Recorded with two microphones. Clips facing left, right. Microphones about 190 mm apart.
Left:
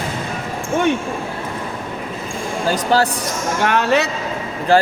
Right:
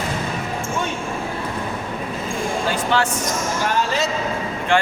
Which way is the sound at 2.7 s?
40° left (ahead or behind).